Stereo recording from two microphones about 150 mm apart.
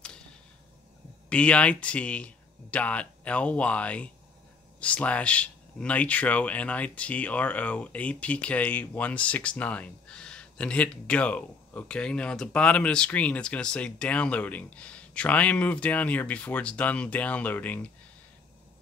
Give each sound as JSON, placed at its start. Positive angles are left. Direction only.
{"t": 1.3, "sound": "speech", "side_deg": 10}